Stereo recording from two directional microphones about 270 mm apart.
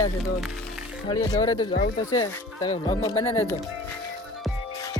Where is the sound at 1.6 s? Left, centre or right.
Left.